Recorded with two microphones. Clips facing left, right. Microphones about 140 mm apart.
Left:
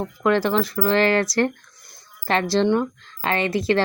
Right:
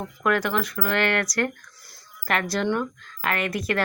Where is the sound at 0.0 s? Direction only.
25° left (ahead or behind).